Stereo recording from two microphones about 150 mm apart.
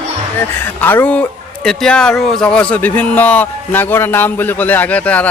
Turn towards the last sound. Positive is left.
turn(degrees=10)  # may be behind; listen again after turning